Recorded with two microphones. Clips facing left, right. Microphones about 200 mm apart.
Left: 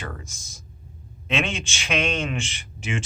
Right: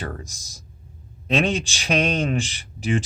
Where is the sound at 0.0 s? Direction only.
40° right (ahead or behind).